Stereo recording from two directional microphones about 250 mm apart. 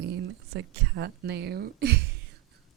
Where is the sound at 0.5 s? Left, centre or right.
Right.